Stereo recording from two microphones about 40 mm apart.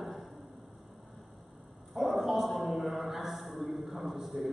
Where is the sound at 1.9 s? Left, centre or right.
Centre.